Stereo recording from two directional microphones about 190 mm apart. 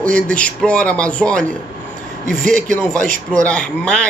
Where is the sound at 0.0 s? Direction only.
5° left (ahead or behind).